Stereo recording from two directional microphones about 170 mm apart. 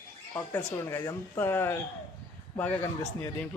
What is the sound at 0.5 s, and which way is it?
Speech, 15° left (ahead or behind).